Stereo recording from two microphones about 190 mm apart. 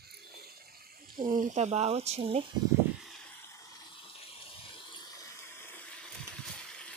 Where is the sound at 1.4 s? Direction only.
40° right (ahead or behind).